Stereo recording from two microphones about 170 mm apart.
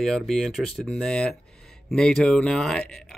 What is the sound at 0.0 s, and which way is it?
Speech, centre (ahead or behind).